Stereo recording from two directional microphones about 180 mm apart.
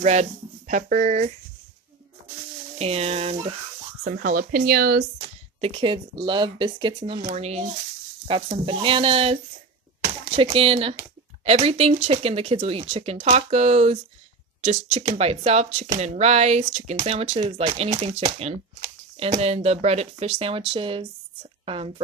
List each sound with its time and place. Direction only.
0.0 s speech: 40° right (ahead or behind)
2.8 s speech: 35° right (ahead or behind)
4.0 s speech: 55° right (ahead or behind)
5.2 s speech: 30° right (ahead or behind)